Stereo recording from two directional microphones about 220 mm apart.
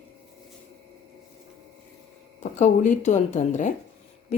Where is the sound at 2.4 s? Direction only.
35° left (ahead or behind).